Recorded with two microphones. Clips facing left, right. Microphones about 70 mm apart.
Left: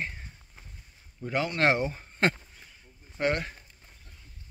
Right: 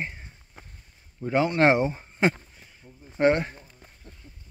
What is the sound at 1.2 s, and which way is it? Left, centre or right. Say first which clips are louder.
A man's voice: right 6 dB; right.